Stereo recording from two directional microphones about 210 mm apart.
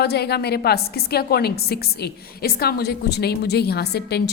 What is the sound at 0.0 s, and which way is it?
A woman's voice, 50° left (ahead or behind).